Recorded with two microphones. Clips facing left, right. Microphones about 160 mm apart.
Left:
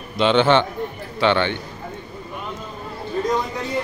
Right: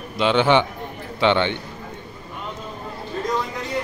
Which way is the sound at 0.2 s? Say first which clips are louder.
Left 1 dB; 10° right (ahead or behind).